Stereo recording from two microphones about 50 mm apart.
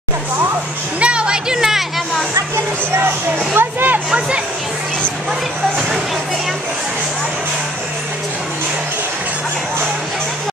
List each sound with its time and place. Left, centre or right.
0.9 s music: right
3.5 s speech: right